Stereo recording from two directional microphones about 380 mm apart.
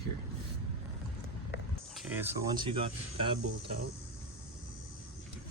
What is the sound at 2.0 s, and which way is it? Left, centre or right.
Speech, centre.